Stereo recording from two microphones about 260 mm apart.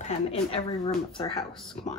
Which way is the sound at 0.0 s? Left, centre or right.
Left.